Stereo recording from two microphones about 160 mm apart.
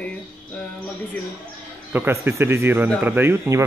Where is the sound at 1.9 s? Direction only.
15° right (ahead or behind).